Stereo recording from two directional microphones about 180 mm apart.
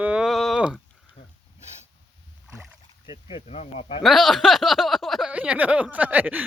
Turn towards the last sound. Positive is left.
turn(degrees=-10)  # may be behind; listen again after turning